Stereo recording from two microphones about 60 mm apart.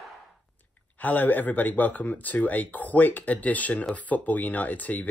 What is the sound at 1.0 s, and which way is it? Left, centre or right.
Speech, left.